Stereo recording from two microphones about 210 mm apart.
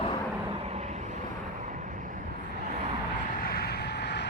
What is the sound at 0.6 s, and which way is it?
Vehicle, 30° right (ahead or behind).